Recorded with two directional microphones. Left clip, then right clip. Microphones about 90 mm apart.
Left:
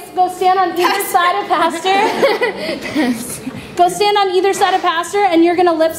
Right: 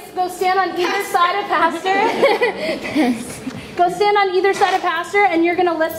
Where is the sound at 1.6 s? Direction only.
45° left (ahead or behind).